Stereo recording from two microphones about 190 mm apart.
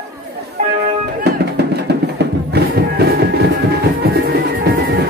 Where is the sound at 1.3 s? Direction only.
60° right (ahead or behind).